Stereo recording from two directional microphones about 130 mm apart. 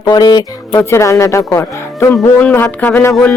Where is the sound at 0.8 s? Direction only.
20° left (ahead or behind).